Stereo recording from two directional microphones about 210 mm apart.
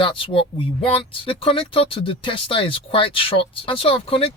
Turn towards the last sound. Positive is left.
turn(degrees=25)  # may be behind; listen again after turning